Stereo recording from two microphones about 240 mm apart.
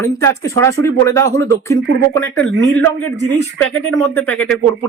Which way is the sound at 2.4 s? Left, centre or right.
Right.